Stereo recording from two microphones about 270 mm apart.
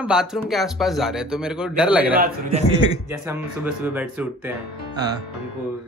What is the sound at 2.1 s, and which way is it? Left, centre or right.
Speech, right.